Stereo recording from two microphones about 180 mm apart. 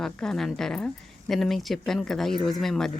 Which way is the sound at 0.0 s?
5° left (ahead or behind).